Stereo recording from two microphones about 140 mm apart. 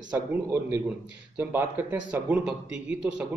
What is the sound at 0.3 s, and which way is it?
A man's voice, 15° right (ahead or behind).